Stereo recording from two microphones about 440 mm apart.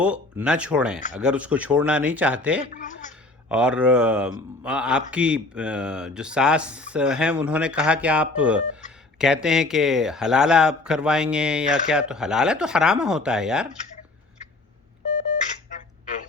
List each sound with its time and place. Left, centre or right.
0.0 s speech: centre
2.7 s a sound: centre
3.5 s speech: centre